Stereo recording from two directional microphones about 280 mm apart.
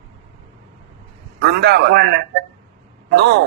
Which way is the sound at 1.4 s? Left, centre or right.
Right.